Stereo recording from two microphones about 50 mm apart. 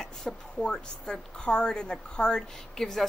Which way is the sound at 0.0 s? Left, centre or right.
Centre.